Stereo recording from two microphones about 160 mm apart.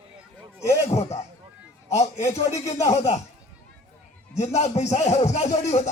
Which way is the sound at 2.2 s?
20° left (ahead or behind).